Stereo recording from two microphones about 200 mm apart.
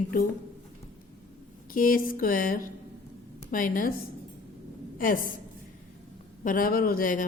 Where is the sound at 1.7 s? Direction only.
45° left (ahead or behind).